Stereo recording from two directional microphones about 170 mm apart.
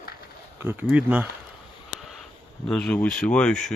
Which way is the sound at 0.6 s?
10° right (ahead or behind).